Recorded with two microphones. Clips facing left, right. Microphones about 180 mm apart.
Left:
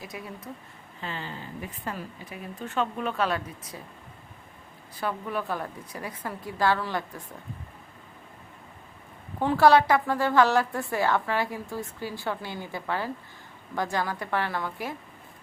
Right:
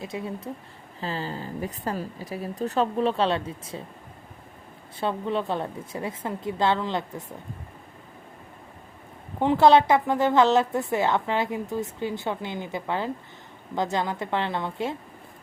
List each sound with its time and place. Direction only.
0.0 s a woman's voice: 25° right (ahead or behind)
4.9 s a woman's voice: 25° right (ahead or behind)
9.4 s a woman's voice: 20° right (ahead or behind)